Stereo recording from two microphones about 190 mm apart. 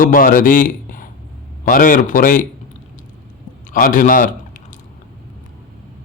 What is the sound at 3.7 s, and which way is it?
Speech, 45° left (ahead or behind).